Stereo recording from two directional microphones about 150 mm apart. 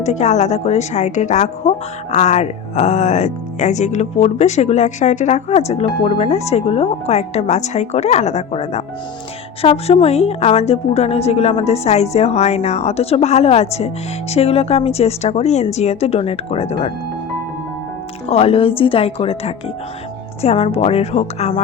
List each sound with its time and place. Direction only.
0.0 s a woman's voice: 50° left (ahead or behind)
18.3 s a woman's voice: 40° left (ahead or behind)